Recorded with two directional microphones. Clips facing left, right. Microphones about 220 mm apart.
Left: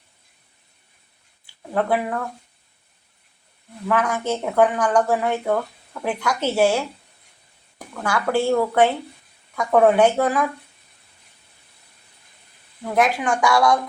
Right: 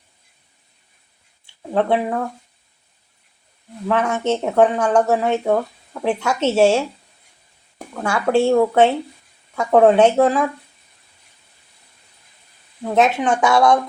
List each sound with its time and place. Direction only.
1.5 s speech: 25° right (ahead or behind)
3.8 s speech: 25° right (ahead or behind)
12.8 s speech: 25° right (ahead or behind)